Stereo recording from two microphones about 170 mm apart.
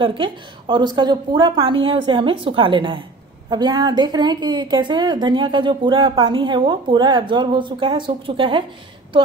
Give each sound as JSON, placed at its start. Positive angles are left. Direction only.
{"t": 0.0, "sound": "a woman's voice", "side_deg": -30}